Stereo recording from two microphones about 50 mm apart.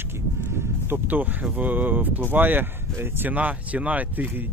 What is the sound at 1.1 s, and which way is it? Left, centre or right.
Speech, right.